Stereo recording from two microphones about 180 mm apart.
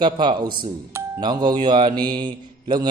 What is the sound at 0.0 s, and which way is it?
A man's voice, 25° right (ahead or behind).